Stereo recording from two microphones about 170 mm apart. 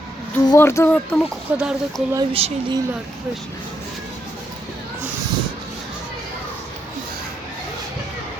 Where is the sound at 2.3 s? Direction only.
35° right (ahead or behind).